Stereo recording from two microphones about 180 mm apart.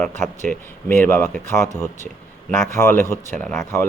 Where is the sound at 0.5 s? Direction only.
10° left (ahead or behind).